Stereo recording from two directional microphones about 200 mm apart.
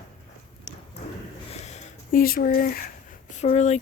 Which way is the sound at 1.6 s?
35° left (ahead or behind).